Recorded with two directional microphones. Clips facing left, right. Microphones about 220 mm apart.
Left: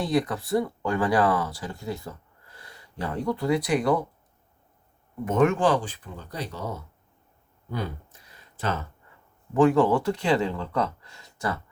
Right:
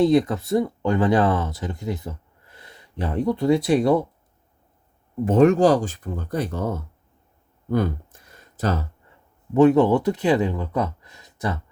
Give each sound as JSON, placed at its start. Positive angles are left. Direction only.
{"t": 0.0, "sound": "speech", "side_deg": -25}
{"t": 5.2, "sound": "speech", "side_deg": -35}
{"t": 7.7, "sound": "a sound", "side_deg": -50}
{"t": 9.6, "sound": "speech", "side_deg": -20}